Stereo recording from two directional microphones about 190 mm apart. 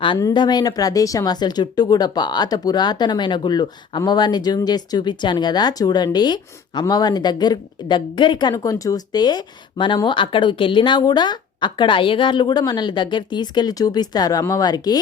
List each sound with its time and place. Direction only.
0.0 s speech: 20° left (ahead or behind)